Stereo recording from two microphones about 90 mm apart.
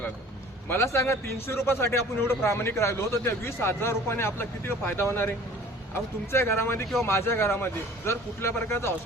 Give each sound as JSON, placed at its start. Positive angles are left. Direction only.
{"t": 0.7, "sound": "a man's voice", "side_deg": 30}